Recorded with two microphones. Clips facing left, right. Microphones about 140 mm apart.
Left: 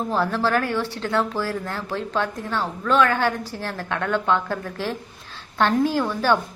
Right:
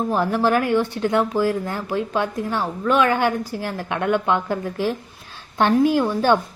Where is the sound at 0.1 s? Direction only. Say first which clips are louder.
Right 2 dB; 15° right (ahead or behind).